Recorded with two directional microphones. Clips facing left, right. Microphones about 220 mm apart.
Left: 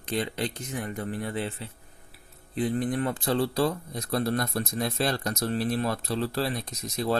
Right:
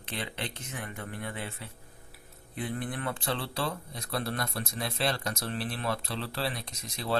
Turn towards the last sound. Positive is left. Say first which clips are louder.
# left 5 dB
turn(degrees=45)  # may be behind; listen again after turning